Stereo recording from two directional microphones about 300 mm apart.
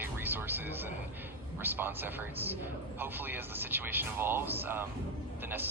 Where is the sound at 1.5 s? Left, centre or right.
Centre.